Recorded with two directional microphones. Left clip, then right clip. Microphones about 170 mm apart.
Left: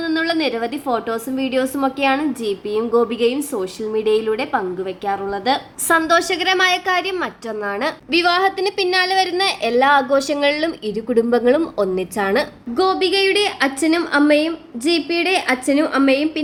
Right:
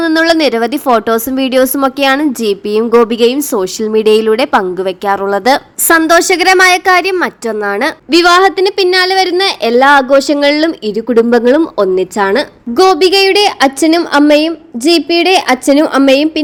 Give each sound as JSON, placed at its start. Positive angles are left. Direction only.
{"t": 0.0, "sound": "a woman's voice", "side_deg": -45}
{"t": 12.7, "sound": "a woman's voice", "side_deg": -50}